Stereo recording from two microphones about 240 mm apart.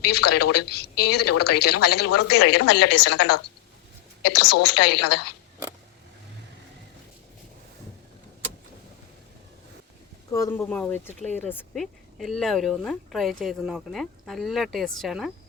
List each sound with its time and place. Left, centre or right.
0.3 s a woman's voice: left
10.3 s speech: centre